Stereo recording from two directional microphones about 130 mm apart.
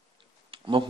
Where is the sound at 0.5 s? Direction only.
45° right (ahead or behind).